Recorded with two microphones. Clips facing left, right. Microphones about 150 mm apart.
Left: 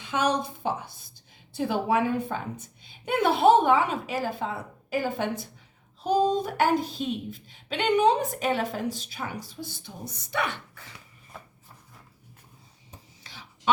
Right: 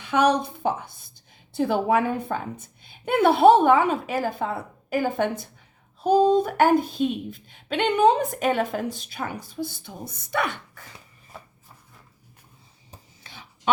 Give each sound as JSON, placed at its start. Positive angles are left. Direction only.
{"t": 0.0, "sound": "a woman's voice", "side_deg": -60}
{"t": 9.8, "sound": "a woman's voice", "side_deg": -55}
{"t": 11.3, "sound": "chopping", "side_deg": 0}